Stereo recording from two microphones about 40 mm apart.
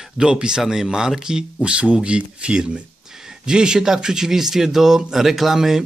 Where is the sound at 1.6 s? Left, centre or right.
Right.